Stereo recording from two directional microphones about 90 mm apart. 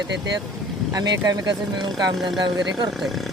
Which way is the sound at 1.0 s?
45° right (ahead or behind).